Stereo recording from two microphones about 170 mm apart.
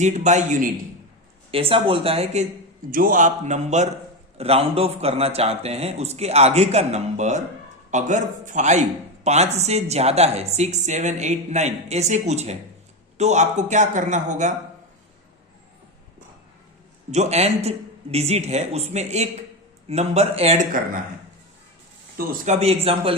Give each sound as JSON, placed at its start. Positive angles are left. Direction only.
{"t": 0.0, "sound": "speech", "side_deg": -45}
{"t": 1.5, "sound": "speech", "side_deg": -35}
{"t": 2.9, "sound": "speech", "side_deg": -55}
{"t": 17.1, "sound": "speech", "side_deg": -40}
{"t": 22.3, "sound": "speech", "side_deg": -40}